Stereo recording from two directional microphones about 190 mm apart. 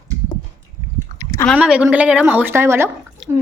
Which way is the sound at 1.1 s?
20° left (ahead or behind).